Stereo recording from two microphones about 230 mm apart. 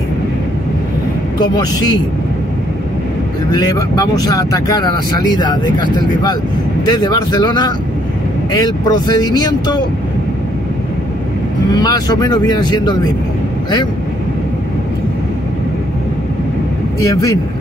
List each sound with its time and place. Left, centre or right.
3.5 s speech: centre
11.7 s speech: centre
17.1 s speech: centre